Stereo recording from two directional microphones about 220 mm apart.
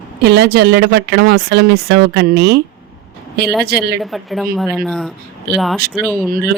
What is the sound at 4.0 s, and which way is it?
Speech, centre (ahead or behind).